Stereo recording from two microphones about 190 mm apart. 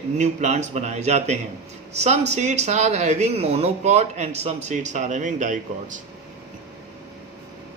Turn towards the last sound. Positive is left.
turn(degrees=-40)  # may be behind; listen again after turning